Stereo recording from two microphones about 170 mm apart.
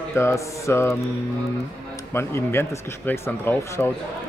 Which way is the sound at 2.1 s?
15° left (ahead or behind).